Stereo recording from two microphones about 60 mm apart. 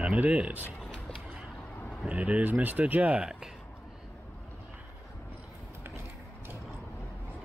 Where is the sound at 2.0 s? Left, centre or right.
Right.